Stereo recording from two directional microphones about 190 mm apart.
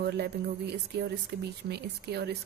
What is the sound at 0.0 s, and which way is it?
A woman's voice, 60° right (ahead or behind).